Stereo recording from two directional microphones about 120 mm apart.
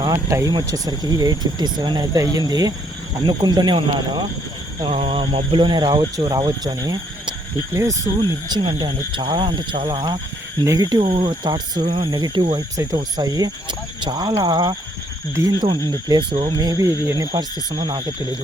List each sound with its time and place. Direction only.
0.3 s speech: 25° right (ahead or behind)
4.8 s speech: 50° right (ahead or behind); by 8.1 s 30° right (ahead or behind)
8.2 s speech: 40° right (ahead or behind)
12.7 s speech: 30° right (ahead or behind)